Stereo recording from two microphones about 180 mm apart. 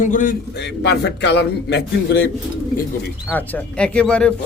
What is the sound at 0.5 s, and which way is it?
A man's voice, 70° left (ahead or behind).